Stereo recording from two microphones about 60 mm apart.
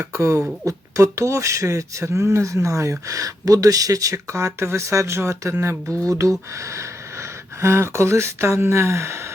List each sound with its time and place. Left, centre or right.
0.0 s speech: right
0.6 s speech: right
6.1 s speech: right
6.7 s speech: right